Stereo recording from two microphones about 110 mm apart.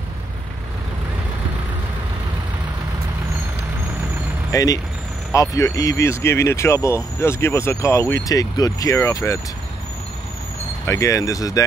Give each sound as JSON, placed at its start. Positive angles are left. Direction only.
{"t": 4.5, "sound": "speech", "side_deg": 30}
{"t": 10.9, "sound": "speech", "side_deg": 30}